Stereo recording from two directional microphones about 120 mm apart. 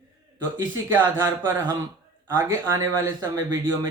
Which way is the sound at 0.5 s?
15° right (ahead or behind).